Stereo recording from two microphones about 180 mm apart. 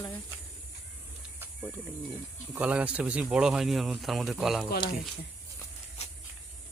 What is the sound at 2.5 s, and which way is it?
Speech, 10° right (ahead or behind).